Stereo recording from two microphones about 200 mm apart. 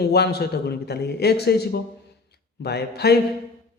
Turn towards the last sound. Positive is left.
turn(degrees=55)  # may be behind; listen again after turning